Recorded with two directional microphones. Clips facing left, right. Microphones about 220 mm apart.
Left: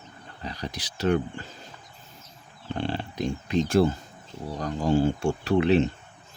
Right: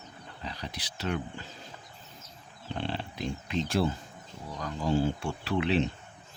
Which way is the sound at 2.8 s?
45° left (ahead or behind).